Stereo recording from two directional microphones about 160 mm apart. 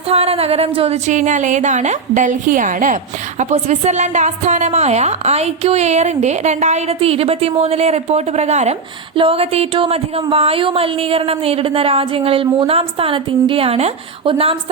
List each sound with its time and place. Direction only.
0.1 s a woman's voice: 40° right (ahead or behind)